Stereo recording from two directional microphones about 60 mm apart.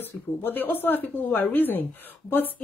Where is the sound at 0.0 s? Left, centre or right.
Left.